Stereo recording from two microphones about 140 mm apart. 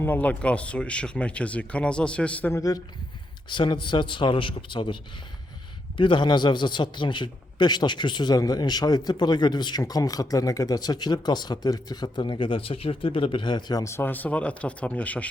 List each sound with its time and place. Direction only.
0.0 s speech: 15° left (ahead or behind)
2.6 s a man's voice: 25° left (ahead or behind)
6.0 s a man's voice: 35° left (ahead or behind); by 15.3 s 10° left (ahead or behind)